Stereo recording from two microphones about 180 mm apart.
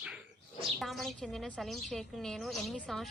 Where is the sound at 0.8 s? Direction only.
Centre (ahead or behind).